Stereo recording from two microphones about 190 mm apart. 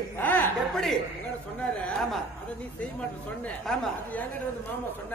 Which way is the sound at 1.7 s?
Centre (ahead or behind).